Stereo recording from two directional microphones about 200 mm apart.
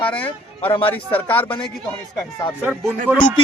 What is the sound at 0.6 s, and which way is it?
Speech, 25° left (ahead or behind).